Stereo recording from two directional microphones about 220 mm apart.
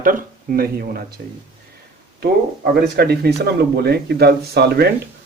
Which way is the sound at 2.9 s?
45° right (ahead or behind).